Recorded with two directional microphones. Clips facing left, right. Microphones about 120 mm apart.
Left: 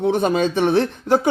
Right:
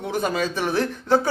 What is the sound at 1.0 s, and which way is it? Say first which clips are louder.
Speech: left 2 dB; 15° left (ahead or behind).